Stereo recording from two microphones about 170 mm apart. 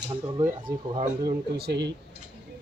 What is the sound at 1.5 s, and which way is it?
Speech, 75° right (ahead or behind).